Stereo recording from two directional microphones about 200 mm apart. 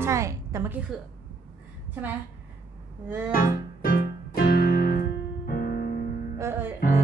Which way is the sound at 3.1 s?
10° right (ahead or behind).